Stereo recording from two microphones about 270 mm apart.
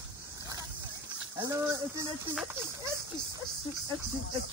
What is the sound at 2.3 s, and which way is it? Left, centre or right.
Speech, centre.